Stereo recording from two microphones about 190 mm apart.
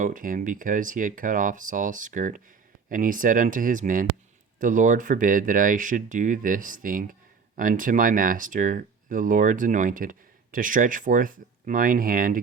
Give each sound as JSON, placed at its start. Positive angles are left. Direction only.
{"t": 0.0, "sound": "speech", "side_deg": -45}